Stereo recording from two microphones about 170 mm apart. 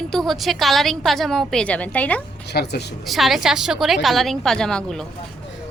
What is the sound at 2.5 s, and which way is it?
Speech, 75° left (ahead or behind).